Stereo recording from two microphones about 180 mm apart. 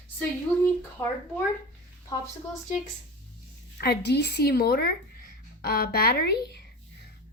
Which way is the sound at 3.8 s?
65° left (ahead or behind).